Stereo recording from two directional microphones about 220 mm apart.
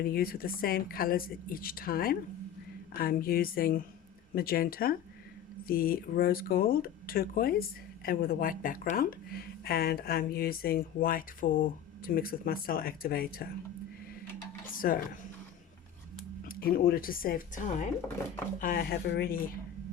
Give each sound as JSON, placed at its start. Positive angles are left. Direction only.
{"t": 0.0, "sound": "speech", "side_deg": 40}
{"t": 14.7, "sound": "speech", "side_deg": 40}
{"t": 16.5, "sound": "speech", "side_deg": 40}